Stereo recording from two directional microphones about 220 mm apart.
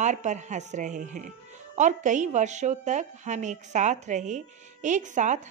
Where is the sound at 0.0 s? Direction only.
30° right (ahead or behind).